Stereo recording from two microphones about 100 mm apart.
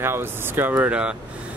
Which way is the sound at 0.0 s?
25° right (ahead or behind).